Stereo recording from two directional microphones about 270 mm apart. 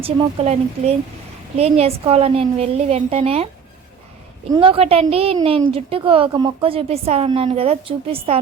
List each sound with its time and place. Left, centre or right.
0.0 s a woman's voice: right
4.5 s a woman's voice: centre